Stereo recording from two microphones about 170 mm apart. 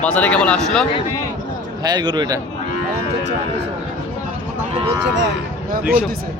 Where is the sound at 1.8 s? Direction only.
25° right (ahead or behind).